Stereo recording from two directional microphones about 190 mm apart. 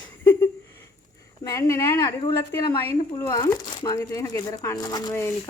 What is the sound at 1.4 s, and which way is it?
Speech, 15° left (ahead or behind).